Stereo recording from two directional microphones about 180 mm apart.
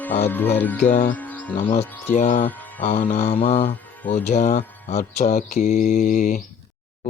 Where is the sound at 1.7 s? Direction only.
40° left (ahead or behind).